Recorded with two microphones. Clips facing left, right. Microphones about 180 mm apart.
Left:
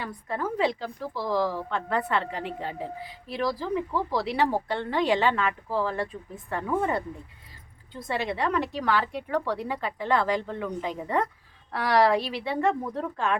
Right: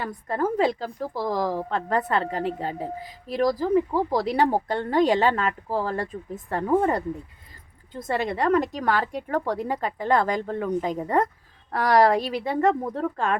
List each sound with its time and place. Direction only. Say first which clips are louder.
0.0 s a woman's voice: right 5 dB; 45° right (ahead or behind)